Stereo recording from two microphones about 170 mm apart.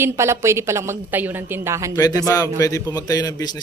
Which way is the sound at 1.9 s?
20° left (ahead or behind).